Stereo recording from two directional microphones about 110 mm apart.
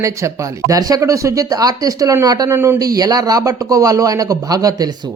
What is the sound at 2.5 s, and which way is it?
Speech, 25° right (ahead or behind).